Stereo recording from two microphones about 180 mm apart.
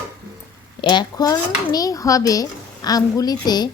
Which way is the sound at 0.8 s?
25° left (ahead or behind).